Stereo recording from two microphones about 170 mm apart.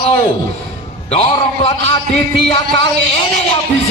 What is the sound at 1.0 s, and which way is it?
Speech, 35° left (ahead or behind).